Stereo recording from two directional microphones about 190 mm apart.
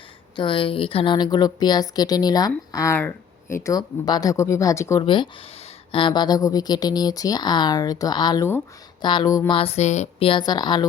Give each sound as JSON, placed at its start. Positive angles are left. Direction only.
{"t": 0.3, "sound": "a woman's voice", "side_deg": 25}
{"t": 5.0, "sound": "a woman's voice", "side_deg": 25}
{"t": 9.6, "sound": "a woman's voice", "side_deg": 35}